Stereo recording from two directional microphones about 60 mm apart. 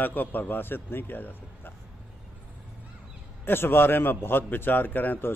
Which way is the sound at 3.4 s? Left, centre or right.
Left.